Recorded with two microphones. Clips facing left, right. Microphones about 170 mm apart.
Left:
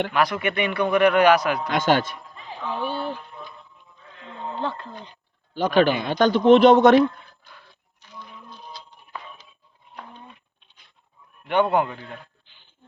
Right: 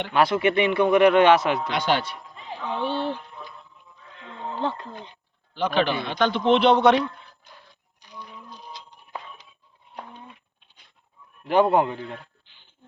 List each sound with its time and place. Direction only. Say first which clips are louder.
0.1 s speech: right 3 dB; 25° right (ahead or behind)
1.7 s a man's voice: left 3 dB; 45° left (ahead or behind)
2.3 s a sound: even; 25° right (ahead or behind)
4.6 s speech: right 3 dB; 20° right (ahead or behind)
5.5 s a man's voice: left 4 dB; 45° left (ahead or behind)
8.0 s a sound: right 1 dB; 15° right (ahead or behind)
11.4 s a man's voice: right 2 dB; 30° right (ahead or behind)